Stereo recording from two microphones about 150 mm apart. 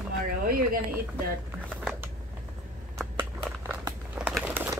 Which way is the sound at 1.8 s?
5° right (ahead or behind).